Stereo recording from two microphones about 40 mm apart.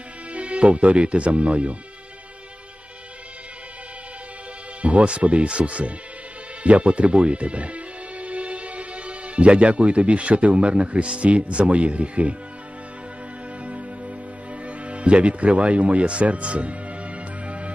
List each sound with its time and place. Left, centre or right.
0.3 s speech: right
4.8 s speech: right
14.7 s music: right